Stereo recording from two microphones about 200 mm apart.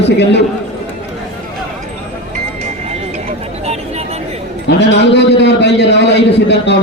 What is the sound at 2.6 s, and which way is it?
Vehicle, 35° right (ahead or behind).